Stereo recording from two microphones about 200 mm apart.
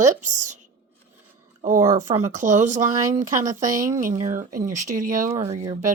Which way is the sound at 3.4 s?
15° right (ahead or behind).